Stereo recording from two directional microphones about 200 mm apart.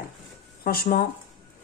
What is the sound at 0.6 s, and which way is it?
Speech, 50° left (ahead or behind).